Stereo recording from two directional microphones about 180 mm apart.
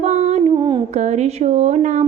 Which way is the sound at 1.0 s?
40° right (ahead or behind).